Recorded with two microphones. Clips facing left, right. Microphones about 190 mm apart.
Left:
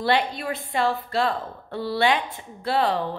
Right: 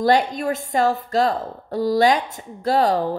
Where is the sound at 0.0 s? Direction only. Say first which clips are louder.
Right 5 dB; 45° right (ahead or behind).